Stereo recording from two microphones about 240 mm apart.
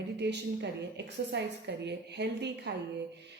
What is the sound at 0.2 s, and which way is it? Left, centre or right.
A woman's voice, right.